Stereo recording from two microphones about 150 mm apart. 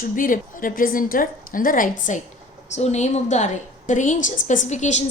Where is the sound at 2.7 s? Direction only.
50° left (ahead or behind).